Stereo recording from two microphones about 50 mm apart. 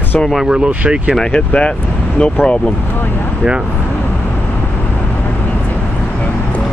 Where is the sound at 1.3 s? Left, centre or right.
Left.